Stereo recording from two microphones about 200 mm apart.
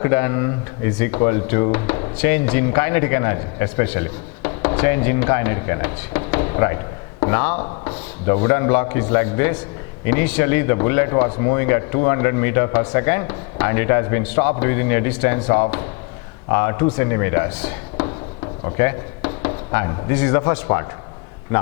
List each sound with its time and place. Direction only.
0.0 s speech: 15° left (ahead or behind)
18.6 s a sound: 20° left (ahead or behind)
19.7 s speech: 15° left (ahead or behind)